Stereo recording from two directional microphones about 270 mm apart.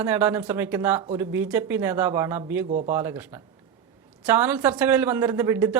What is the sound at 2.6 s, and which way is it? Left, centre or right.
Speech, right.